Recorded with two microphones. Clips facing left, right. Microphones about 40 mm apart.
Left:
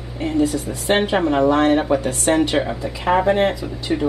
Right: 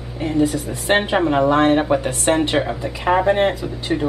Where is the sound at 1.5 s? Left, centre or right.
Right.